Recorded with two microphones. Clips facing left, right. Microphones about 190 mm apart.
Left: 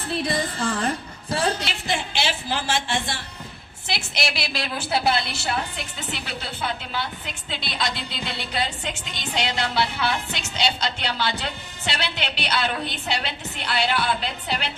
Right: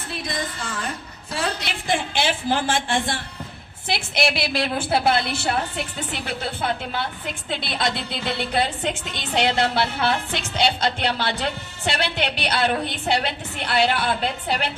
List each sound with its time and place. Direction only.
0.1 s a woman's voice: 35° left (ahead or behind)
1.9 s a woman's voice: 50° right (ahead or behind)